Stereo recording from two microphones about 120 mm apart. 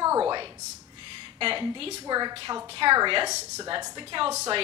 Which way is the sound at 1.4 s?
45° right (ahead or behind).